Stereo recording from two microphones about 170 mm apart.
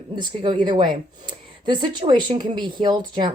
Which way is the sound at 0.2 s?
25° right (ahead or behind).